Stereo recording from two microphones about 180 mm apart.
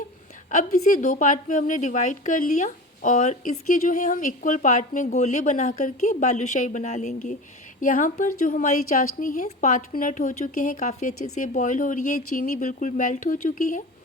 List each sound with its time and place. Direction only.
0.5 s a woman's voice: 50° left (ahead or behind)